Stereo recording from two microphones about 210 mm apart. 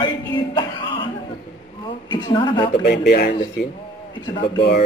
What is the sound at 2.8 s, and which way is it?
Speech, 50° left (ahead or behind).